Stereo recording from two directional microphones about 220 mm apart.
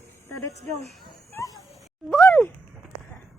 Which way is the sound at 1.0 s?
15° left (ahead or behind).